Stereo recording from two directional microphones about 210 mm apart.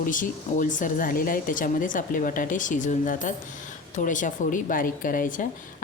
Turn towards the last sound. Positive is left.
turn(degrees=40)  # may be behind; listen again after turning